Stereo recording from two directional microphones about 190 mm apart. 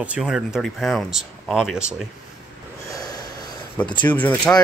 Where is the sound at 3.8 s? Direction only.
25° left (ahead or behind).